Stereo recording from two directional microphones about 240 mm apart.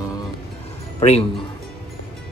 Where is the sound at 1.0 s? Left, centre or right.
Left.